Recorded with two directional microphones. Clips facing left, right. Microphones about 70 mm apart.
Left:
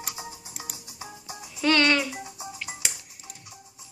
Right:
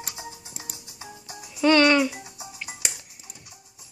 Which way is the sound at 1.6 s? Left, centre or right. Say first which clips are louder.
Right 4 dB; right.